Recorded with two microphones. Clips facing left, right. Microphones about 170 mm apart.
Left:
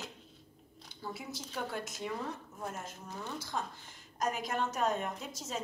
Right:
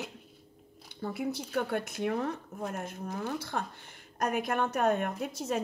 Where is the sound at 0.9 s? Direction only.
60° right (ahead or behind).